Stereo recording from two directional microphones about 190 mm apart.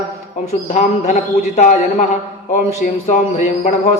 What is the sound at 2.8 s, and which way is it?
A man's voice, 40° left (ahead or behind).